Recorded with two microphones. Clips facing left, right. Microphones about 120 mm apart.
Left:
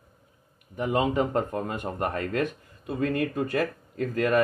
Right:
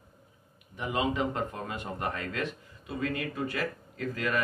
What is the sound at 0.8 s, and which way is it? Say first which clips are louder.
Speech: left 5 dB; 45° left (ahead or behind).